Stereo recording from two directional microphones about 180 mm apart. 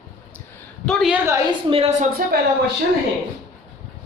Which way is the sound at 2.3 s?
60° right (ahead or behind).